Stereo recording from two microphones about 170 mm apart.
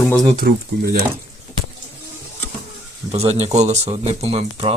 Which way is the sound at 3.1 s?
35° right (ahead or behind).